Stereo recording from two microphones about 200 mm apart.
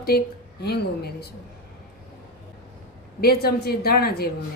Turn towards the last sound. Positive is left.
turn(degrees=50)  # may be behind; listen again after turning